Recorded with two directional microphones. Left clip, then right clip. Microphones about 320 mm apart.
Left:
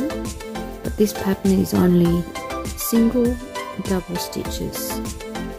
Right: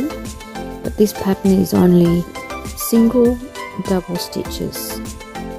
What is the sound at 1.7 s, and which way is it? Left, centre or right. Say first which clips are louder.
Speech: right 5 dB; centre.